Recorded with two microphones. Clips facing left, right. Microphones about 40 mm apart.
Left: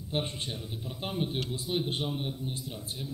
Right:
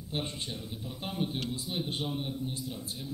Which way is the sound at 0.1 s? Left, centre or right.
Left.